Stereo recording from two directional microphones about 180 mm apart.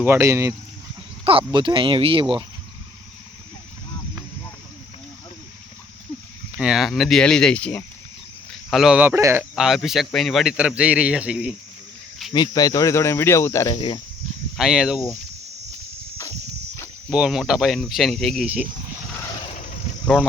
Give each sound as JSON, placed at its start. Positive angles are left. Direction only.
{"t": 0.0, "sound": "speech", "side_deg": -15}
{"t": 1.2, "sound": "speech", "side_deg": -30}
{"t": 6.6, "sound": "a man's voice", "side_deg": -5}
{"t": 9.6, "sound": "a man's voice", "side_deg": 0}
{"t": 12.3, "sound": "speech", "side_deg": 25}
{"t": 14.5, "sound": "a man's voice", "side_deg": 0}
{"t": 17.1, "sound": "a man's voice", "side_deg": 0}